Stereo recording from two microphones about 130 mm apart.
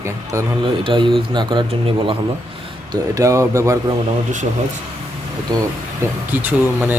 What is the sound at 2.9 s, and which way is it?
Speech, 25° right (ahead or behind).